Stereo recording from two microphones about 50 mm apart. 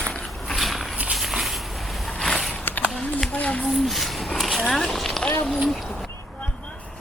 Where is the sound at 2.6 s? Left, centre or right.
Left.